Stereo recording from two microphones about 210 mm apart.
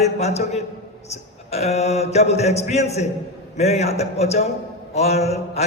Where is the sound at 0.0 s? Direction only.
30° left (ahead or behind).